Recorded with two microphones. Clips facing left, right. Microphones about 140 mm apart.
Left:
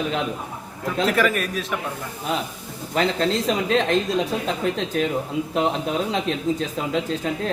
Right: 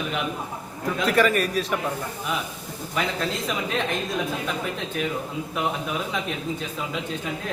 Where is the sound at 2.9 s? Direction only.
30° left (ahead or behind).